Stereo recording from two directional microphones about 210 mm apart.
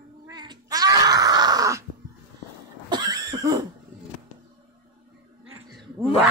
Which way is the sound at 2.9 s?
20° right (ahead or behind).